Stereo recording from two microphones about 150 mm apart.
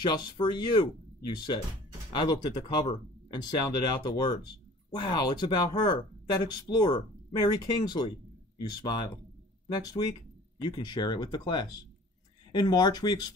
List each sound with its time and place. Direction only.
0.0 s speech: 30° left (ahead or behind)
9.7 s speech: 30° left (ahead or behind)